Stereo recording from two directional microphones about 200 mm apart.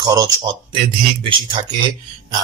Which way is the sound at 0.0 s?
20° right (ahead or behind).